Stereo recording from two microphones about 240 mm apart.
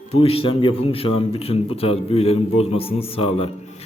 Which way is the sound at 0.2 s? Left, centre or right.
Left.